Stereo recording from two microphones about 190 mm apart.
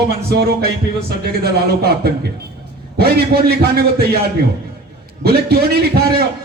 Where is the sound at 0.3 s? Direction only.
55° right (ahead or behind).